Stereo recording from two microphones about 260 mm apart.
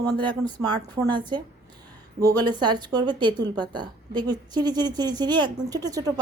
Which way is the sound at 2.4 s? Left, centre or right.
Centre.